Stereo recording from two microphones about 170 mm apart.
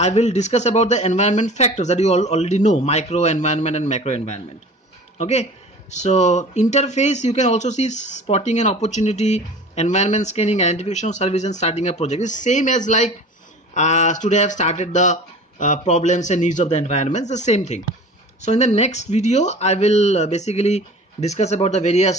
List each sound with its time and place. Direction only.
0.0 s speech: 40° left (ahead or behind)